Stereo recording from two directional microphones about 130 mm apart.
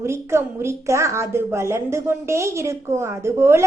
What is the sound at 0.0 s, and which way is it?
A woman's voice, 20° right (ahead or behind).